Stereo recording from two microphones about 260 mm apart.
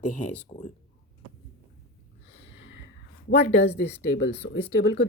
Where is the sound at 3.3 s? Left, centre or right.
Left.